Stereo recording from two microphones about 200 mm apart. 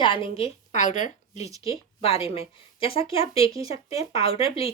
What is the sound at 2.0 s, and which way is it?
A woman's voice, 30° left (ahead or behind).